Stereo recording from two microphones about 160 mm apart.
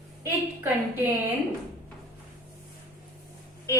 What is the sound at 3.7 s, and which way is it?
Speech, 20° left (ahead or behind).